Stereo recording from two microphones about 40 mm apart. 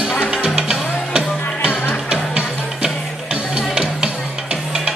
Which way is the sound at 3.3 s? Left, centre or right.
Right.